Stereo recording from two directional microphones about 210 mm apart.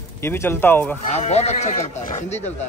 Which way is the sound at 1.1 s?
30° left (ahead or behind).